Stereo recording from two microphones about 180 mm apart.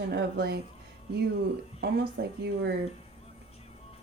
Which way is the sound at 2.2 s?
60° right (ahead or behind).